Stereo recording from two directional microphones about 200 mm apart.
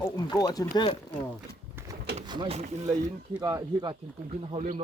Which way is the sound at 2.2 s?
20° right (ahead or behind).